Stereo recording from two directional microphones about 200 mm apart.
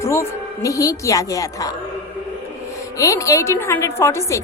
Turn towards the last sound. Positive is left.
turn(degrees=15)  # may be behind; listen again after turning